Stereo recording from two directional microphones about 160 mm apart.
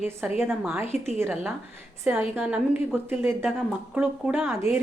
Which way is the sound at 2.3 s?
15° right (ahead or behind).